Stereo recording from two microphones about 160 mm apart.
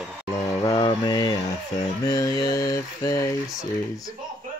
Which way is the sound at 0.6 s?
30° left (ahead or behind).